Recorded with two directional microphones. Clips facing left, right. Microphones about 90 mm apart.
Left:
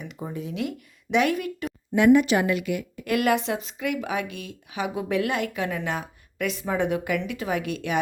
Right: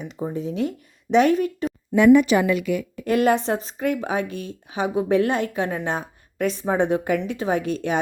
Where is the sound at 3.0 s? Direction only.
30° right (ahead or behind).